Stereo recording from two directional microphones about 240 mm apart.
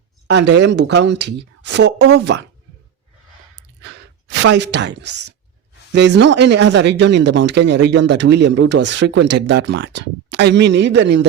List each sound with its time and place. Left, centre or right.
0.3 s speech: right
3.8 s speech: right